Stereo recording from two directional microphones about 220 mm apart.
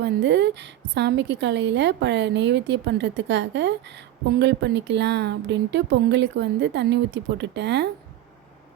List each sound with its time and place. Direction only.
0.0 s a woman's voice: 50° right (ahead or behind)